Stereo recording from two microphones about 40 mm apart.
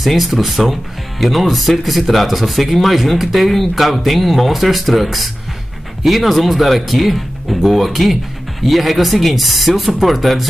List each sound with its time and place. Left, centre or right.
0.0 s speech: centre